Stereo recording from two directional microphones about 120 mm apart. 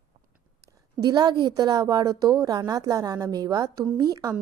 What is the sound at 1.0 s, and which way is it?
Speech, 35° right (ahead or behind).